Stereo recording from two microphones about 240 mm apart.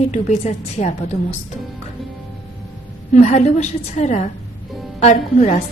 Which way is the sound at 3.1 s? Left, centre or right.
Left.